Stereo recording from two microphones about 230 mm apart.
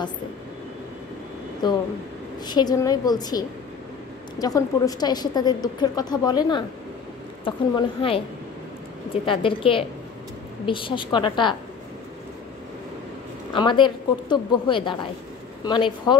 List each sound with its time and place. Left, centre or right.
1.6 s a woman's voice: centre
13.5 s a woman's voice: left